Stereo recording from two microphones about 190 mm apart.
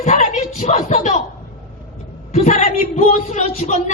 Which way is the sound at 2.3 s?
35° left (ahead or behind).